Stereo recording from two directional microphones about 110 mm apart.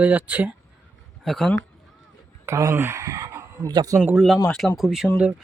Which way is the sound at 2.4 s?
25° right (ahead or behind).